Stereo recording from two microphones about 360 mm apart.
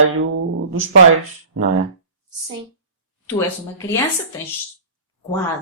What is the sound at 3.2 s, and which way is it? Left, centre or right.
Speech, centre.